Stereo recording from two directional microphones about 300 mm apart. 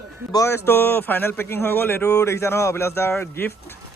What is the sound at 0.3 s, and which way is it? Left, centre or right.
A man's voice, centre.